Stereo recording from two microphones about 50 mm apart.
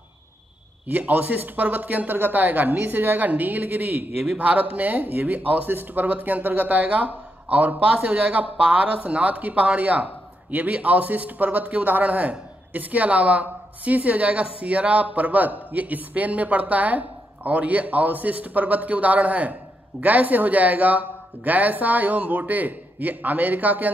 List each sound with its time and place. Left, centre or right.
0.8 s speech: right